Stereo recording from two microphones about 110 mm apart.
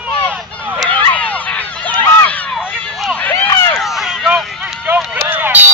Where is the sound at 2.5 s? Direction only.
5° right (ahead or behind).